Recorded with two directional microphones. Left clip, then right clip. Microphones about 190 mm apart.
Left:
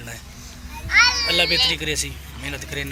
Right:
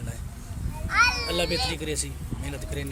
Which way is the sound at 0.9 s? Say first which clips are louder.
Left 6 dB; 70° right (ahead or behind).